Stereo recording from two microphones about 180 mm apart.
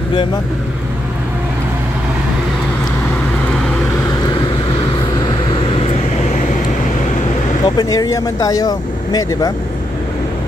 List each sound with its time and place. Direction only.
7.6 s speech: 20° left (ahead or behind)